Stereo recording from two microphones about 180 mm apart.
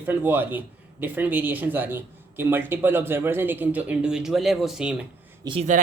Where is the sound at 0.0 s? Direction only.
10° right (ahead or behind).